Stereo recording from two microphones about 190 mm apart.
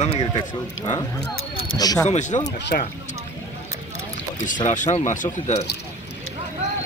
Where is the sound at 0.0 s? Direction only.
30° left (ahead or behind).